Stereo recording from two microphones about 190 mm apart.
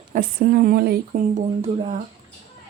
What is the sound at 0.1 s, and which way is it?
Speech, 50° right (ahead or behind).